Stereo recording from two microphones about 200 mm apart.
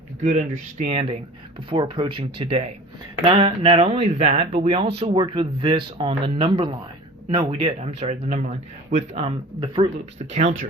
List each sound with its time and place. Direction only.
0.2 s speech: 40° right (ahead or behind)
0.9 s speech: 30° right (ahead or behind)